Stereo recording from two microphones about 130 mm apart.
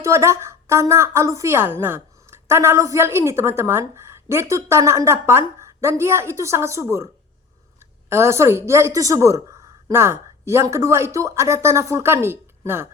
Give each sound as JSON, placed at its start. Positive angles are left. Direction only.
{"t": 0.0, "sound": "a woman's voice", "side_deg": -20}